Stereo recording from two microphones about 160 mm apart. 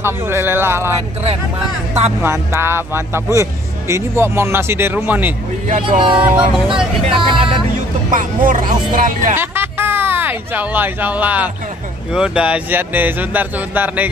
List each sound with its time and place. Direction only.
0.0 s a man's voice: 15° right (ahead or behind)
2.2 s a man's voice: 15° right (ahead or behind)
5.9 s speech: 30° right (ahead or behind)
6.1 s a man's voice: 10° right (ahead or behind)
7.1 s speech: 30° right (ahead or behind)
8.1 s speech: 55° right (ahead or behind)
9.3 s a sound: 15° right (ahead or behind)
12.1 s a man's voice: 5° right (ahead or behind)